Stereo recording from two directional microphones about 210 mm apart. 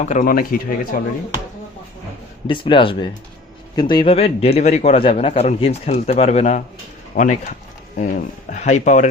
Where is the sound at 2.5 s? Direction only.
25° left (ahead or behind).